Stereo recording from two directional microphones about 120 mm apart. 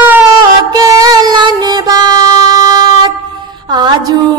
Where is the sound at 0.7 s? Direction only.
30° right (ahead or behind).